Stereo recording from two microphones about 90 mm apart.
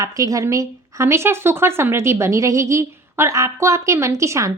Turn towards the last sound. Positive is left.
turn(degrees=-35)  # may be behind; listen again after turning